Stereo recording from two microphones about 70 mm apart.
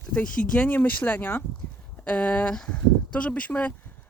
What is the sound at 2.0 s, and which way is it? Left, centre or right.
Speech, centre.